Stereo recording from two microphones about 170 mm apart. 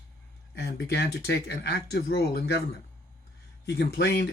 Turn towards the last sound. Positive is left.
turn(degrees=75)  # may be behind; listen again after turning